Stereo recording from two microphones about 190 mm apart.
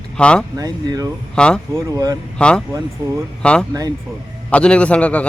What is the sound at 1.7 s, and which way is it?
Speech, 20° right (ahead or behind).